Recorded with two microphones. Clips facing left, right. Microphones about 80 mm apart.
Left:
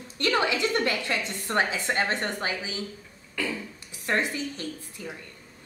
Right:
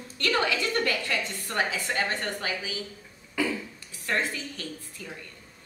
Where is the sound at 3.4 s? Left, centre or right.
Centre.